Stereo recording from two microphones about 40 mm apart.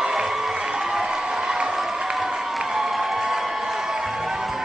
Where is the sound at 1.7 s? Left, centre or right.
Centre.